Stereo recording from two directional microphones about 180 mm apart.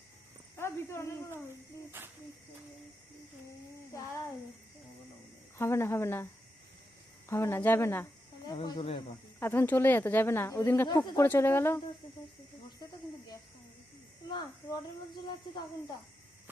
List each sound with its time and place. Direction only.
0.5 s speech: 15° left (ahead or behind)
2.0 s cricket: 10° right (ahead or behind)
5.5 s speech: 15° left (ahead or behind)
7.3 s speech: 15° left (ahead or behind)
8.4 s speech: 25° left (ahead or behind)
9.4 s speech: 15° left (ahead or behind)
11.2 s speech: 15° left (ahead or behind)
14.3 s speech: 25° left (ahead or behind)